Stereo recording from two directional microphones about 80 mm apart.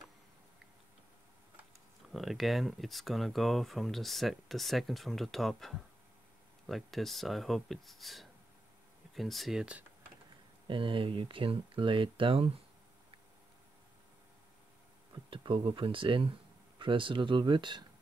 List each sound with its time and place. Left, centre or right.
2.1 s speech: centre
10.7 s speech: right
15.2 s speech: right